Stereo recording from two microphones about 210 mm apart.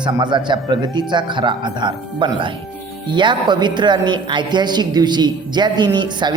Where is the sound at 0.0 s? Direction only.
20° right (ahead or behind).